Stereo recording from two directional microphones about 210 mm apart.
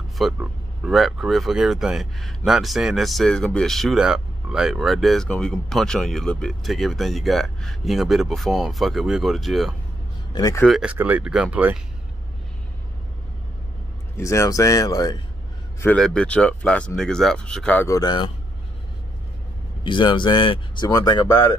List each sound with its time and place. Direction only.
0.2 s speech: centre (ahead or behind)
10.3 s speech: 15° left (ahead or behind)
10.6 s speech: centre (ahead or behind)
14.1 s speech: 15° left (ahead or behind)
15.8 s speech: 5° left (ahead or behind)
19.8 s speech: 25° left (ahead or behind)